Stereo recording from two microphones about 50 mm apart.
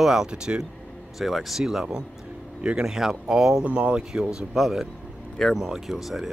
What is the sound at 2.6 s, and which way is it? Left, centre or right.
Speech, centre.